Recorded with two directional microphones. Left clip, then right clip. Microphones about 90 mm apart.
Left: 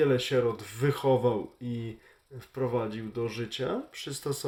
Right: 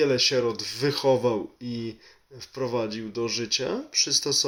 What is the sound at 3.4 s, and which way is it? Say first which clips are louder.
Speech: right 5 dB; 15° left (ahead or behind).